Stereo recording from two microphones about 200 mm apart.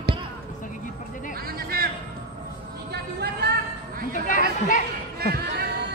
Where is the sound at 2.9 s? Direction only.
55° right (ahead or behind).